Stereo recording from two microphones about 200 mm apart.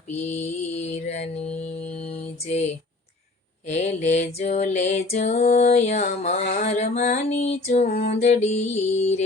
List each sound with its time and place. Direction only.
0.1 s mantra: 30° left (ahead or behind)
3.7 s music: 35° left (ahead or behind)